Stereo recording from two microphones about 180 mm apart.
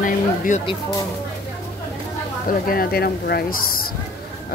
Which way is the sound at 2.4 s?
55° left (ahead or behind).